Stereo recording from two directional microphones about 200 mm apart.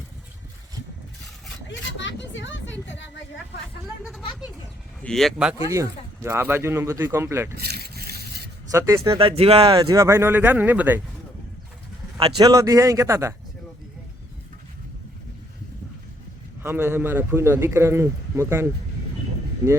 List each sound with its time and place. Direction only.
1.7 s speech: 65° left (ahead or behind)
3.8 s speech: centre (ahead or behind)
5.6 s a man's voice: 15° right (ahead or behind)
7.5 s a sound: 50° right (ahead or behind)
8.7 s a man's voice: 15° right (ahead or behind)
9.1 s speech: 30° right (ahead or behind)
9.9 s a man's voice: 15° right (ahead or behind)
12.1 s a man's voice: 20° right (ahead or behind)
16.6 s a man's voice: 10° right (ahead or behind)